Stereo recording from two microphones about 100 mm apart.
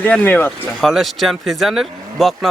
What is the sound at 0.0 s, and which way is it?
Speech, 20° left (ahead or behind).